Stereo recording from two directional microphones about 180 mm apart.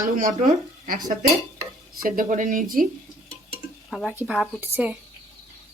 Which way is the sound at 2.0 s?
50° right (ahead or behind).